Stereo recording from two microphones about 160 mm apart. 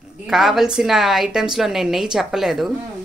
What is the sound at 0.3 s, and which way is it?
A woman's voice, centre (ahead or behind).